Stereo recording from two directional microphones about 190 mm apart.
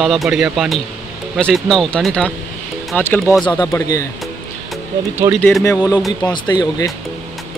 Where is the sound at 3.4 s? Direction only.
20° left (ahead or behind).